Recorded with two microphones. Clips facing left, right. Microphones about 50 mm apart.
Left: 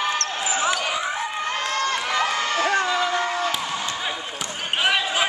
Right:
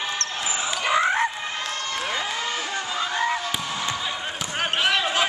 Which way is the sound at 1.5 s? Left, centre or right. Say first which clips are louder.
Left 5 dB; left.